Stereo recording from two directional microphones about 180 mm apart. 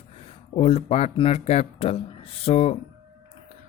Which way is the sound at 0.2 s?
35° left (ahead or behind).